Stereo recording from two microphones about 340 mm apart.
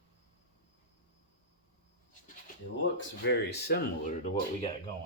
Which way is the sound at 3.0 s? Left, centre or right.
Left.